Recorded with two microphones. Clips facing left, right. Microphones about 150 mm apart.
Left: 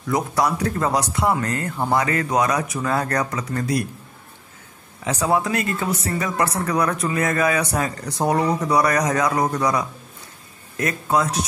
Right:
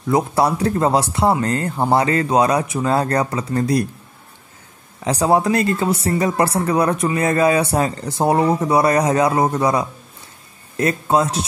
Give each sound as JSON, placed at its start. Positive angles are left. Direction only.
{"t": 0.1, "sound": "speech", "side_deg": -30}
{"t": 5.0, "sound": "speech", "side_deg": -35}